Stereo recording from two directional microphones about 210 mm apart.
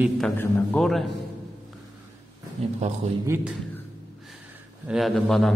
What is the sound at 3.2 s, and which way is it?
Speech, 10° right (ahead or behind).